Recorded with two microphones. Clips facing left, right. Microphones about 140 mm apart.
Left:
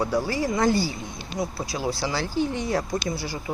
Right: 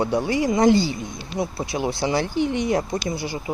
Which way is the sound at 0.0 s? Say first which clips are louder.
Right 3 dB; 25° right (ahead or behind).